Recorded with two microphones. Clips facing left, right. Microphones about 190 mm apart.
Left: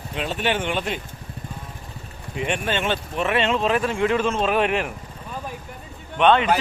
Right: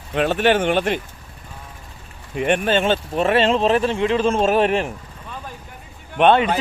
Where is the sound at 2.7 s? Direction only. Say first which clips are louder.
Right 6 dB; 35° right (ahead or behind).